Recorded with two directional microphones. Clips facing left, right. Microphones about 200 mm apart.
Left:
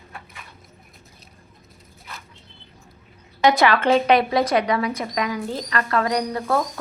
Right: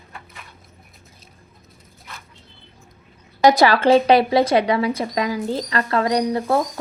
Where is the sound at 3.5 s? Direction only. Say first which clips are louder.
Right 3 dB; 35° right (ahead or behind).